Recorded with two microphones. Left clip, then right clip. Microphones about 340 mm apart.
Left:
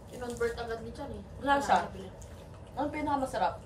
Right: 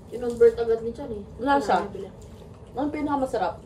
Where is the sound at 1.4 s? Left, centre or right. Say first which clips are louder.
Right 5 dB; centre.